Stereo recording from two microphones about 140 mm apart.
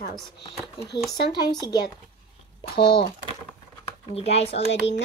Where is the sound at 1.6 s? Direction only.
30° left (ahead or behind).